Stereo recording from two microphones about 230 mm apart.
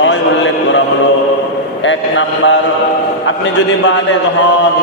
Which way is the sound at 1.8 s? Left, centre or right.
Left.